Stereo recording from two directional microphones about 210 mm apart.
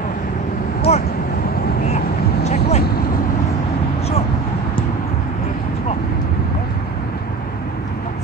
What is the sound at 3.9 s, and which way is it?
Vehicle, 30° left (ahead or behind).